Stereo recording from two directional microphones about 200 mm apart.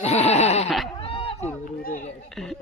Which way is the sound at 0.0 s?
30° left (ahead or behind).